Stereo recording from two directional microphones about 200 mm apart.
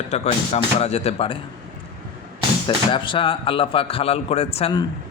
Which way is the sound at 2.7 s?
25° left (ahead or behind).